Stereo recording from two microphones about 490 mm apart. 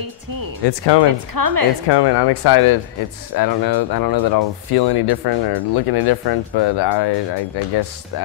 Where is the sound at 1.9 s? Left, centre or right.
Left.